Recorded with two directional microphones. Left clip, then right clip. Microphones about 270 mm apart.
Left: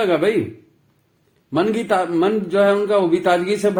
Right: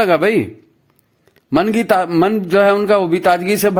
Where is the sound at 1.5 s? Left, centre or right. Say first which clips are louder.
Right 4 dB; right.